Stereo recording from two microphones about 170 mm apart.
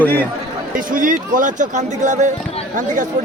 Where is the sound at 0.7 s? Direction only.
55° right (ahead or behind).